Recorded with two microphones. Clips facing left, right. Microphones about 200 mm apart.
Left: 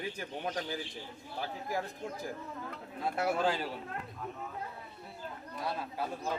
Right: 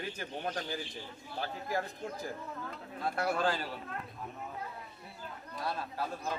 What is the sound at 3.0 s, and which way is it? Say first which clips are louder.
Speech: left 1 dB; 20° left (ahead or behind).